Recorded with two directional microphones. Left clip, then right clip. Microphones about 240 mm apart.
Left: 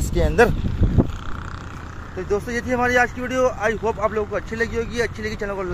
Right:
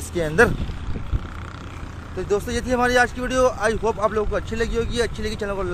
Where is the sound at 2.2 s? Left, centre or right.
Centre.